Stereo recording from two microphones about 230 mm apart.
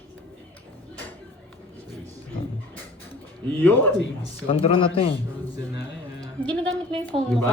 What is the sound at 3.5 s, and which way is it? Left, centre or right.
Speech, centre.